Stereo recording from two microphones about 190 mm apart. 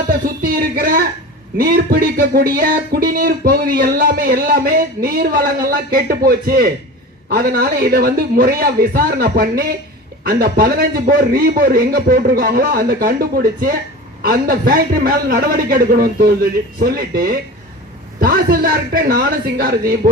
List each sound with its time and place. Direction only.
0.1 s a man's voice: 50° right (ahead or behind)